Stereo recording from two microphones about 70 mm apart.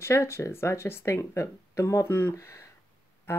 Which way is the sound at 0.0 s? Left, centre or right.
Left.